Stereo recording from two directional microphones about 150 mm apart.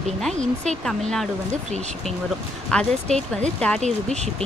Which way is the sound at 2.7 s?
5° left (ahead or behind).